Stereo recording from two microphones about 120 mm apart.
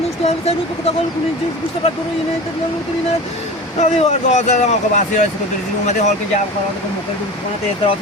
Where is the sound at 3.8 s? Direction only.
65° left (ahead or behind).